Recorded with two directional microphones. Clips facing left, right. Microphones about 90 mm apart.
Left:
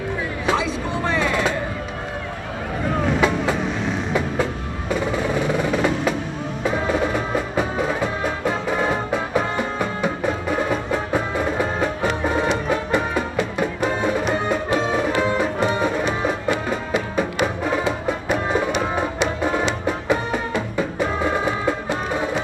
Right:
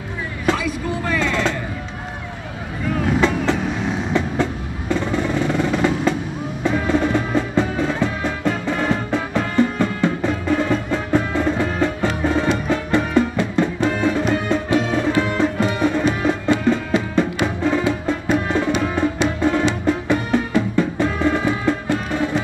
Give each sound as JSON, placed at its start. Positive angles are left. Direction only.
{"t": 0.6, "sound": "music", "side_deg": 25}
{"t": 1.2, "sound": "music", "side_deg": 15}
{"t": 3.2, "sound": "vehicle", "side_deg": 10}
{"t": 4.1, "sound": "train", "side_deg": 10}
{"t": 5.5, "sound": "music", "side_deg": 10}